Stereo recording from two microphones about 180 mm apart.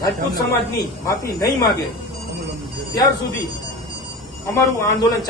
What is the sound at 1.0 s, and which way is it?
Speech, 15° left (ahead or behind).